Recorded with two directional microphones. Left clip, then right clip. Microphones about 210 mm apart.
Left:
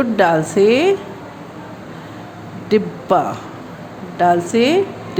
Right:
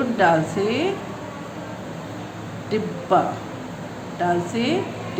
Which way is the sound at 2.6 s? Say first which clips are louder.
Left 7 dB; 50° left (ahead or behind).